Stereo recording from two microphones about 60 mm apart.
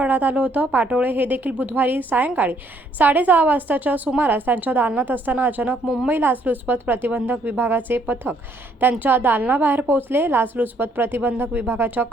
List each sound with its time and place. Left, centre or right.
0.0 s a woman's voice: right